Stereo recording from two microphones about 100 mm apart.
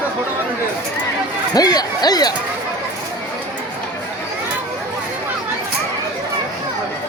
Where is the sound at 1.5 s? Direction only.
40° left (ahead or behind).